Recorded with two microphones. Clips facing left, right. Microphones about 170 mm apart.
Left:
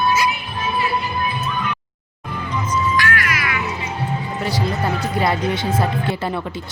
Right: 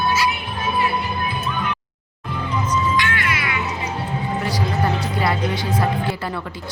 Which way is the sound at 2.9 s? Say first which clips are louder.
Left 1 dB; 25° right (ahead or behind).